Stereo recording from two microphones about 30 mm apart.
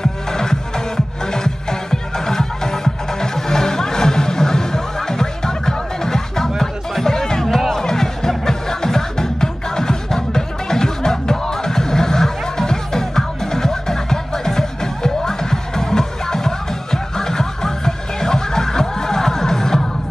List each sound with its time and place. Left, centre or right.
0.0 s music: centre